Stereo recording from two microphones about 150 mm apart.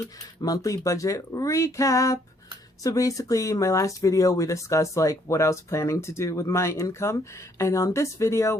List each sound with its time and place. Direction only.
0.4 s speech: 25° left (ahead or behind)